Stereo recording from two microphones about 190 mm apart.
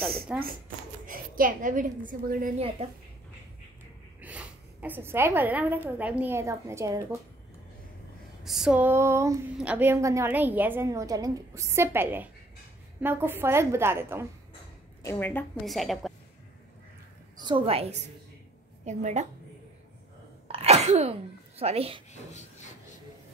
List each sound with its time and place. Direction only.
0.3 s a woman's voice: 5° right (ahead or behind)
1.0 s a woman's voice: 45° right (ahead or behind)
2.8 s a woman's voice: 35° right (ahead or behind)
4.2 s a sound: 5° right (ahead or behind)
5.9 s a woman's voice: 10° right (ahead or behind)
8.5 s a woman's voice: 5° right (ahead or behind)
15.0 s a woman's voice: 10° left (ahead or behind)
17.4 s a woman's voice: 25° right (ahead or behind)
20.5 s sneeze: 35° right (ahead or behind)